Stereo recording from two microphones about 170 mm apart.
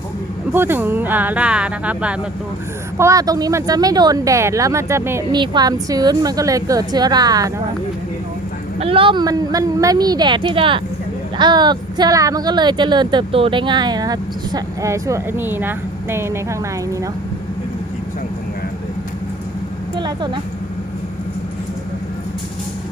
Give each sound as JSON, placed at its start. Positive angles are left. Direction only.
{"t": 0.5, "sound": "speech", "side_deg": -10}
{"t": 3.0, "sound": "speech", "side_deg": -20}
{"t": 8.8, "sound": "speech", "side_deg": -30}
{"t": 20.0, "sound": "speech", "side_deg": -25}